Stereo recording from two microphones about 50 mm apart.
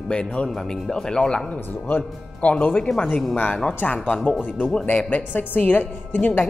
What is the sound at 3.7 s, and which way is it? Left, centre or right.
Speech, left.